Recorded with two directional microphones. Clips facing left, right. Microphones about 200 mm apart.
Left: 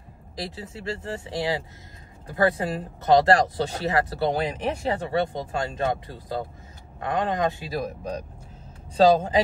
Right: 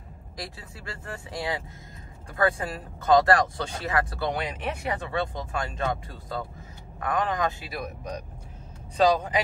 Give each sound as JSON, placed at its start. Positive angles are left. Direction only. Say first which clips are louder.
{"t": 0.4, "sound": "speech", "louder": "left 6 dB", "side_deg": 25}
{"t": 4.4, "sound": "speech", "louder": "left 5 dB", "side_deg": 35}
{"t": 7.0, "sound": "speech", "louder": "left 2 dB", "side_deg": 25}